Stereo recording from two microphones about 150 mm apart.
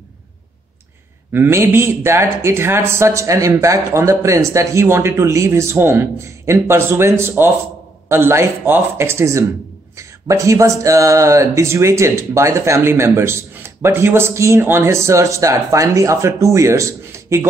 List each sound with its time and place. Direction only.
1.3 s speech: 15° right (ahead or behind)